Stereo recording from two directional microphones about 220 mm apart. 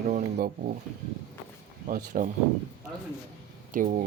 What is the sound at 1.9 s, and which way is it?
Speech, 40° right (ahead or behind).